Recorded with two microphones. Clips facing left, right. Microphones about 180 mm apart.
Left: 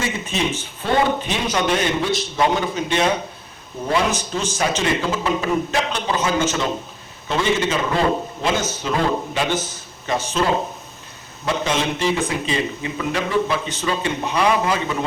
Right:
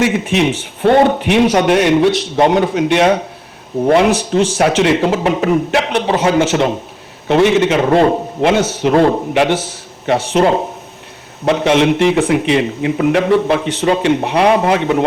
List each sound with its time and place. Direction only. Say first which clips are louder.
0.0 s a man's voice: right 10 dB; 70° right (ahead or behind)